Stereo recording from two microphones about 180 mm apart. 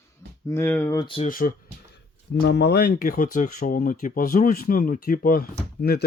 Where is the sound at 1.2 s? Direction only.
50° left (ahead or behind).